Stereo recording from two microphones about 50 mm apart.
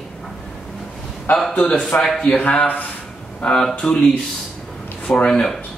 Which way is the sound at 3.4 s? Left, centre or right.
Centre.